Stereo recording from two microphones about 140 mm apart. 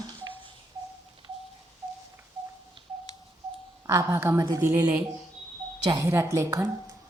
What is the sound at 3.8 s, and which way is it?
A woman's voice, 20° right (ahead or behind).